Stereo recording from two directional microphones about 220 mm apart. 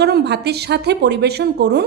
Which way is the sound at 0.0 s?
50° right (ahead or behind).